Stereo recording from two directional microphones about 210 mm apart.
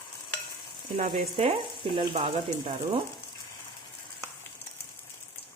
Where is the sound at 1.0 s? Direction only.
30° right (ahead or behind).